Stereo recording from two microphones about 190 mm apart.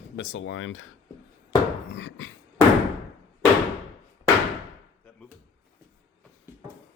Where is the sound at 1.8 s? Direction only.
80° left.